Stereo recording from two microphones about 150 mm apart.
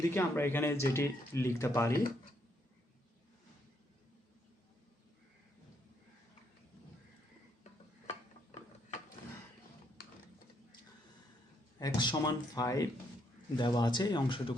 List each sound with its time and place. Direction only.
0.0 s speech: 15° left (ahead or behind)
11.8 s speech: 30° left (ahead or behind)